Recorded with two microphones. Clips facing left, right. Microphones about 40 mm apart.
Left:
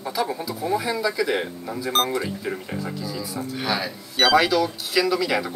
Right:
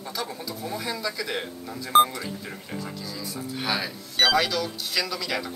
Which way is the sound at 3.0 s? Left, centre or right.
Centre.